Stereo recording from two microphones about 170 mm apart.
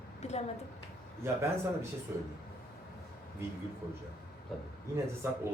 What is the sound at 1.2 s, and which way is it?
Speech, 15° right (ahead or behind).